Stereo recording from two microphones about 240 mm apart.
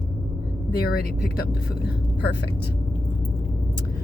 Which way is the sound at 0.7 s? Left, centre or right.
Left.